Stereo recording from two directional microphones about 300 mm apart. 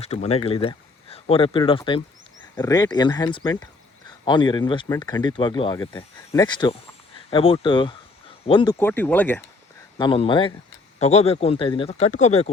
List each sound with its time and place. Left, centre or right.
0.0 s speech: left